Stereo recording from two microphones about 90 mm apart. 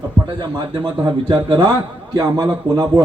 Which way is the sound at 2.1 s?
45° right (ahead or behind).